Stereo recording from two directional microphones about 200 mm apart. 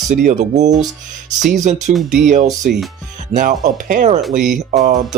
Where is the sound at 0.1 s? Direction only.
40° right (ahead or behind).